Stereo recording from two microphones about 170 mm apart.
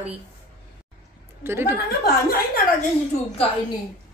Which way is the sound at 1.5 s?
15° right (ahead or behind).